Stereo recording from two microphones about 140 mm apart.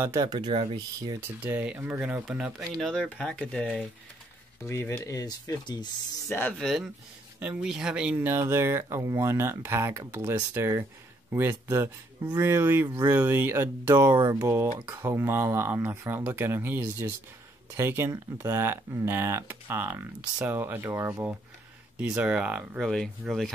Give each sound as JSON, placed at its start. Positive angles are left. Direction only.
{"t": 0.0, "sound": "speech", "side_deg": -25}
{"t": 1.2, "sound": "speech", "side_deg": -10}
{"t": 2.8, "sound": "speech", "side_deg": 5}
{"t": 4.6, "sound": "speech", "side_deg": 20}
{"t": 6.2, "sound": "speech", "side_deg": 15}
{"t": 6.6, "sound": "speech", "side_deg": 0}
{"t": 21.9, "sound": "speech", "side_deg": -10}